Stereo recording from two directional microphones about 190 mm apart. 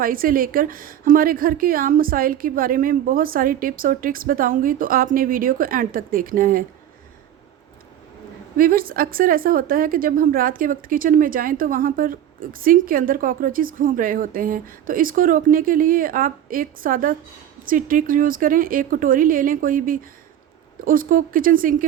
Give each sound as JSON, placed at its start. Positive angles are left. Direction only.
{"t": 0.0, "sound": "a woman's voice", "side_deg": -50}
{"t": 8.5, "sound": "a woman's voice", "side_deg": -50}